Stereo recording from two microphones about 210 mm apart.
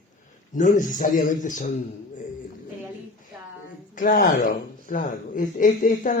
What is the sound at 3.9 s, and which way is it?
Speech, 40° left (ahead or behind).